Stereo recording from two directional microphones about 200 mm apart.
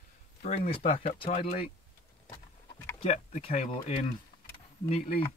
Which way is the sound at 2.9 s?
30° left (ahead or behind).